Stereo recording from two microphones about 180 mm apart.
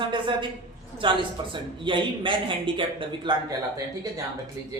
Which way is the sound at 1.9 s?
25° right (ahead or behind).